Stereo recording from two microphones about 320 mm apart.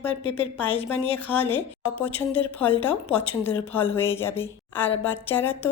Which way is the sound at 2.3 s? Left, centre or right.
Centre.